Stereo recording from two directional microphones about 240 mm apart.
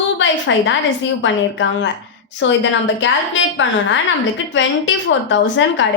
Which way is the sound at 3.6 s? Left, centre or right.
Left.